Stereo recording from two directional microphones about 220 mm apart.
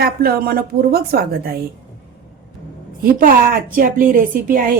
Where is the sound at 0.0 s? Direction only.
45° right (ahead or behind).